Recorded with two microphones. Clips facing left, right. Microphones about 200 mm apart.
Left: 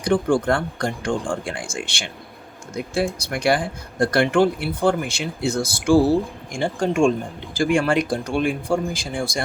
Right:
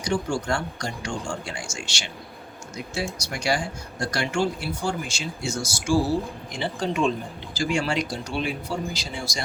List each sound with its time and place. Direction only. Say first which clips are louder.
0.0 s speech: left 7 dB; 55° left (ahead or behind)